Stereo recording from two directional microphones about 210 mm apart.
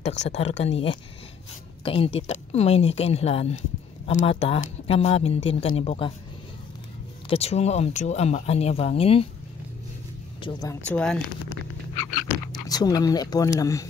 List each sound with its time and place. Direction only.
0.0 s speech: 35° left (ahead or behind)
7.2 s speech: 30° left (ahead or behind)
10.4 s speech: 15° left (ahead or behind)
10.9 s speech: 5° left (ahead or behind)
12.6 s speech: 20° left (ahead or behind)